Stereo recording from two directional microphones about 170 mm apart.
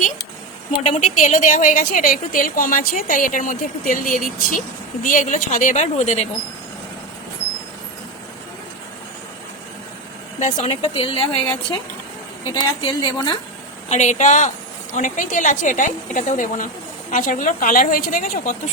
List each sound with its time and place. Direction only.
0.9 s a woman's voice: 45° left (ahead or behind)
10.4 s speech: 40° left (ahead or behind)
12.5 s a woman's voice: 25° left (ahead or behind)
13.9 s a woman's voice: 45° left (ahead or behind)